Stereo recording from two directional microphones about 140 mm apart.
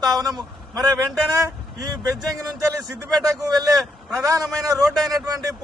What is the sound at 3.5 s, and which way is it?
A man's voice, 25° right (ahead or behind).